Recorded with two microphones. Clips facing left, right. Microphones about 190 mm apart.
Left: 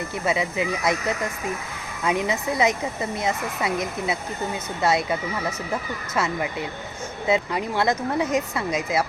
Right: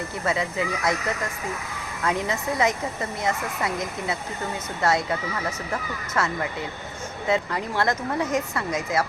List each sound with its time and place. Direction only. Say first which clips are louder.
0.3 s speech: left 2 dB; 15° left (ahead or behind)
2.0 s speech: left 2 dB; 15° left (ahead or behind)
6.1 s speech: left 1 dB; 20° left (ahead or behind)